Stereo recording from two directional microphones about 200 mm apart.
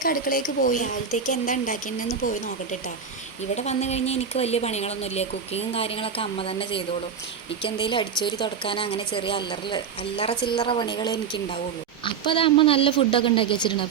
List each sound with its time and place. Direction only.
0.0 s speech: 45° left (ahead or behind)
3.5 s a woman's voice: 35° left (ahead or behind)